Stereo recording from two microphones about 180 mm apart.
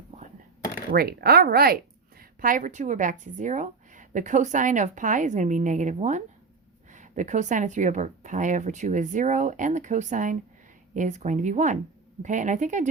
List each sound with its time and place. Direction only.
0.9 s speech: 60° right (ahead or behind); by 12.9 s 45° right (ahead or behind)